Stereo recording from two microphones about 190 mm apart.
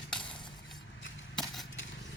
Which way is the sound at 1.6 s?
80° left.